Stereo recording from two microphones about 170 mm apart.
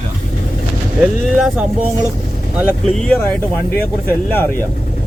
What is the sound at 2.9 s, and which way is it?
Speech, 5° left (ahead or behind).